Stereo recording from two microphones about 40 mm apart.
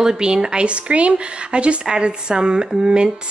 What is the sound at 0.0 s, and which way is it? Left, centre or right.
A woman's voice, centre.